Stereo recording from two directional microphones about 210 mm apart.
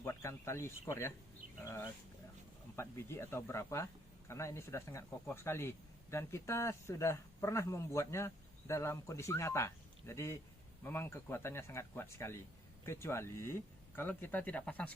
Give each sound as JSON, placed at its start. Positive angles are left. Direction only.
{"t": 0.0, "sound": "speech", "side_deg": 10}